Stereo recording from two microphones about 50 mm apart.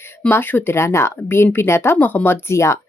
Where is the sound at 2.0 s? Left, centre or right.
Left.